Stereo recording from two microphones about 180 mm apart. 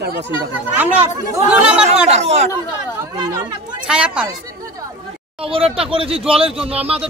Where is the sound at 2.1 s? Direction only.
40° right (ahead or behind).